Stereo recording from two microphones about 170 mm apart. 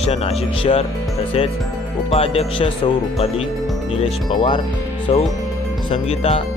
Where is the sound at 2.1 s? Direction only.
35° left (ahead or behind).